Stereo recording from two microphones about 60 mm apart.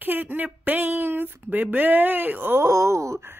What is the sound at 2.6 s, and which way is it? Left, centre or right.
Speech, right.